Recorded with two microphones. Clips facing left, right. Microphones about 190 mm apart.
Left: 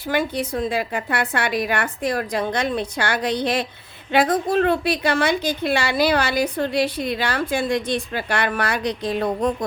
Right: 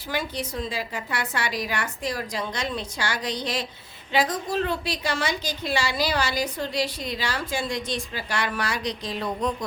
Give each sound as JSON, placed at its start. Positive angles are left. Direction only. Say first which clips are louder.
{"t": 0.1, "sound": "a woman's voice", "louder": "left 7 dB", "side_deg": 55}